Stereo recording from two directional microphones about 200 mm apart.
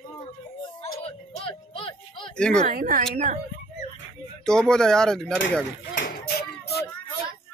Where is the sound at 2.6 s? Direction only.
40° right (ahead or behind).